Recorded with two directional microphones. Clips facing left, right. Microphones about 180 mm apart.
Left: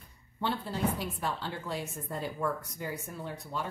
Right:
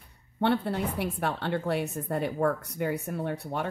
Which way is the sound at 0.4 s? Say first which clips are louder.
Right 6 dB; 65° right (ahead or behind).